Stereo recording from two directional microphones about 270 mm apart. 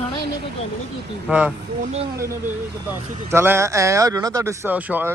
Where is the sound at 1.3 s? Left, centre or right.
Centre.